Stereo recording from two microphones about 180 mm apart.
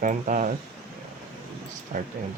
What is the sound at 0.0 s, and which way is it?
Speech, 45° right (ahead or behind).